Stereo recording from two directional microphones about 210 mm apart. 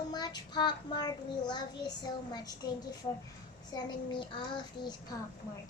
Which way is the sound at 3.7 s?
20° left (ahead or behind).